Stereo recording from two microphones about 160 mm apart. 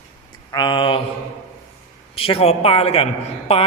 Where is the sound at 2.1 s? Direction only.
35° left (ahead or behind).